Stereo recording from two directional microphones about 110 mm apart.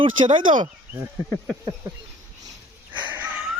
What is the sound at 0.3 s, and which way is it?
Speech, 45° right (ahead or behind).